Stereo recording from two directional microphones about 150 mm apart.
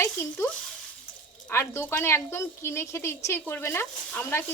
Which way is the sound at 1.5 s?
15° left (ahead or behind).